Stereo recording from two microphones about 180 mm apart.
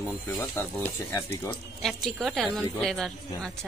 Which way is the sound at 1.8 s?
Centre (ahead or behind).